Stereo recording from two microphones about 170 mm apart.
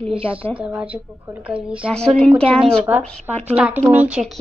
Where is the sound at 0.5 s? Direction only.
5° right (ahead or behind).